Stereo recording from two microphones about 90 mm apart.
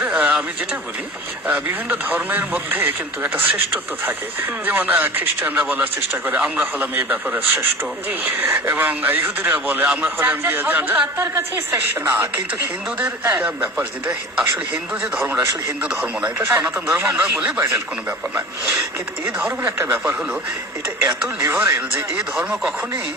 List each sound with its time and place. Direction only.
0.0 s a sound: 10° right (ahead or behind)
1.5 s speech: 15° right (ahead or behind)
4.6 s speech: 20° right (ahead or behind)
11.2 s speech: 30° right (ahead or behind)
16.4 s speech: 30° right (ahead or behind)
16.8 s speech: 10° right (ahead or behind)
21.3 s speech: 25° right (ahead or behind)
22.2 s speech: 10° right (ahead or behind)